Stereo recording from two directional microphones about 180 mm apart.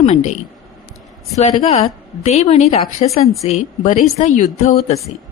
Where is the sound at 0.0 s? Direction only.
35° left (ahead or behind).